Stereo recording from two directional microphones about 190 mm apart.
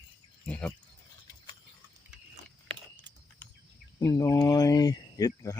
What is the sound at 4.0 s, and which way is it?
Speech, 15° left (ahead or behind).